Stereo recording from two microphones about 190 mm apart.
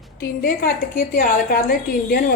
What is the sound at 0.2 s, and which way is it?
A woman's voice, 50° left (ahead or behind).